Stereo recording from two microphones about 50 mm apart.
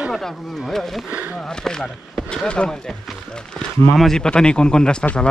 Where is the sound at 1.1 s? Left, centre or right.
Right.